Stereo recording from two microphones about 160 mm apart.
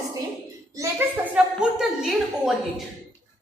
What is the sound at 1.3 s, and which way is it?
A woman's voice, 5° right (ahead or behind).